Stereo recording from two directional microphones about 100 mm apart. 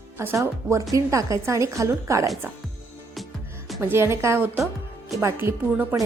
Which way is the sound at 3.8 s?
25° right (ahead or behind).